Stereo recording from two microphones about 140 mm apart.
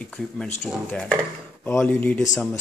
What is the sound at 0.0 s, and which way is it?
Speech, 10° left (ahead or behind).